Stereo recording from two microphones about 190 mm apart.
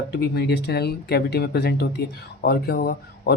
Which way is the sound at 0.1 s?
60° left (ahead or behind).